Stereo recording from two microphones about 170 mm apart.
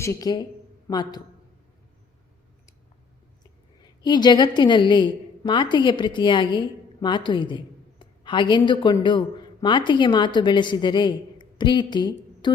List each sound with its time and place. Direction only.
0.0 s a woman's voice: 20° left (ahead or behind)
4.0 s a woman's voice: 25° left (ahead or behind)